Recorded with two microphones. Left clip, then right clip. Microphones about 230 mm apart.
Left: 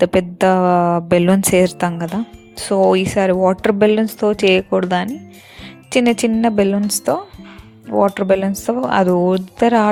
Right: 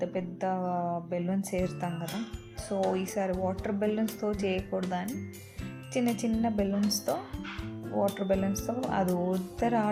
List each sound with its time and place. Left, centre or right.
0.0 s a woman's voice: left
7.9 s speech: left